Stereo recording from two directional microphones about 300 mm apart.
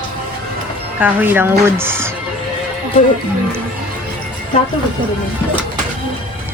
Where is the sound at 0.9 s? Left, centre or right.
Centre.